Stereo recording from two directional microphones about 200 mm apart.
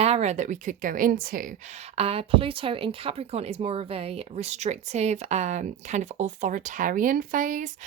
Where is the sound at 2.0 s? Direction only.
30° right (ahead or behind).